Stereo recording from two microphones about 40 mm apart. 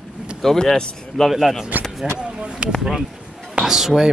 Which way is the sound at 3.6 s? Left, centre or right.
Centre.